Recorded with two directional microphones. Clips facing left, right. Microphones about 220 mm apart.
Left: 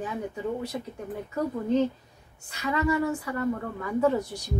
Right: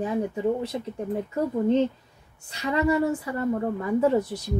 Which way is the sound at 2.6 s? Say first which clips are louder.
Right 3 dB; 25° right (ahead or behind).